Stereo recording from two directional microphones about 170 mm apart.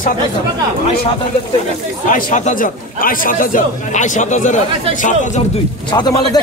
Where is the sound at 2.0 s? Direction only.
55° left (ahead or behind).